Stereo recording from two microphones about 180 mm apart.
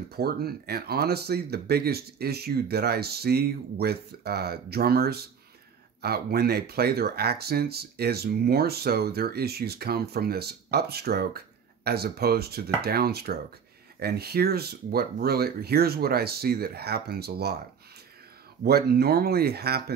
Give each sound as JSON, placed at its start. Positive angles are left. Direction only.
{"t": 0.1, "sound": "speech", "side_deg": -60}
{"t": 18.6, "sound": "speech", "side_deg": -60}